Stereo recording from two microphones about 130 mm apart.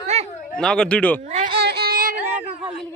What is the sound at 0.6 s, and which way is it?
Speech, 5° left (ahead or behind).